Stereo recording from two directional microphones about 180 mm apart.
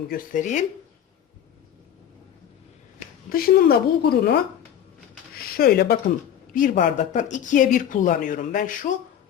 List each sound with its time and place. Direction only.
0.1 s speech: 50° left (ahead or behind)
3.2 s a woman's voice: 55° left (ahead or behind)
5.4 s speech: 55° left (ahead or behind)
6.5 s speech: 50° left (ahead or behind)